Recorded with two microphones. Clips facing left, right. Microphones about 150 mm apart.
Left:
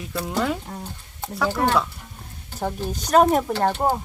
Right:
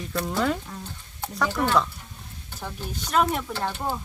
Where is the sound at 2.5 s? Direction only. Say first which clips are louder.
Left 8 dB; 45° left (ahead or behind).